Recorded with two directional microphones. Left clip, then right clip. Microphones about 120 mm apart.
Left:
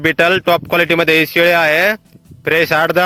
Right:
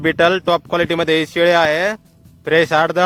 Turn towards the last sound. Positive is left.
turn(degrees=25)  # may be behind; listen again after turning